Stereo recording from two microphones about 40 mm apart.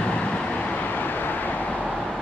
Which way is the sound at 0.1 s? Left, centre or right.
Left.